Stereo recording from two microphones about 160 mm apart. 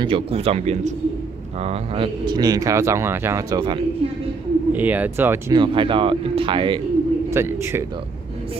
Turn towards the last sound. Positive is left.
turn(degrees=-15)  # may be behind; listen again after turning